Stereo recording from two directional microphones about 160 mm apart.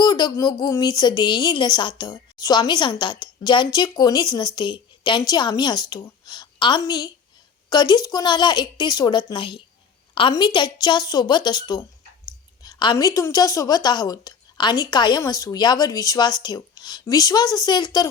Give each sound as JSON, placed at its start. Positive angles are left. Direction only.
{"t": 0.0, "sound": "a woman's voice", "side_deg": 25}